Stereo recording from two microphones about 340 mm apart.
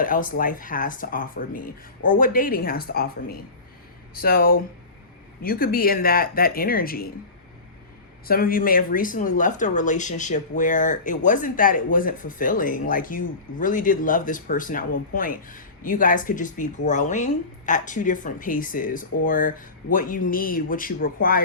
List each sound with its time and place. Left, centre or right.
0.0 s speech: left
8.3 s speech: left